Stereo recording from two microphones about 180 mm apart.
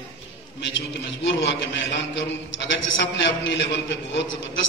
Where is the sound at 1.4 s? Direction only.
75° left (ahead or behind).